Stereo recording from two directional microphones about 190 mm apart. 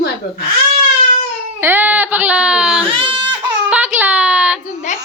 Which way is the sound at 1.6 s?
10° right (ahead or behind).